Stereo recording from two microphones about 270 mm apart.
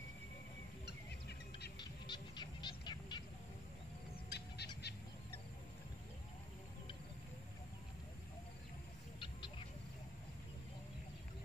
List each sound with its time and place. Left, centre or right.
1.8 s a sound: centre
4.3 s bird: left
9.2 s bird: centre